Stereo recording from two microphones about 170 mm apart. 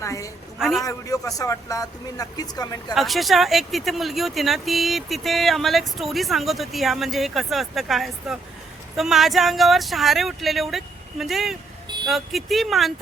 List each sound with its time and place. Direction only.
0.0 s a woman's voice: 20° left (ahead or behind)
0.6 s speech: centre (ahead or behind)
0.9 s speech: 20° left (ahead or behind)
2.9 s speech: centre (ahead or behind)